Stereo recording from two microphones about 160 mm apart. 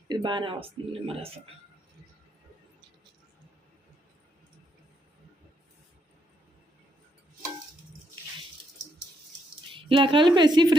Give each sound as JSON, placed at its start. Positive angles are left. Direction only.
{"t": 0.1, "sound": "speech", "side_deg": -30}
{"t": 9.7, "sound": "speech", "side_deg": -35}